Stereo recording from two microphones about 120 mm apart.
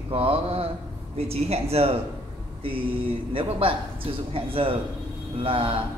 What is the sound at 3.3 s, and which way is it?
A man's voice, 50° right (ahead or behind).